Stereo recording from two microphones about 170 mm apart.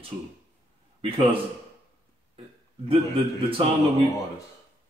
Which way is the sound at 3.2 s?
30° right (ahead or behind).